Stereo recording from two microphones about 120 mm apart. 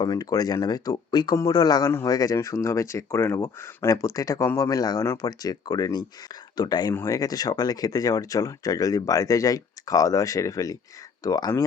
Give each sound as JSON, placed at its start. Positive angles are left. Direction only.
{"t": 0.0, "sound": "speech", "side_deg": 30}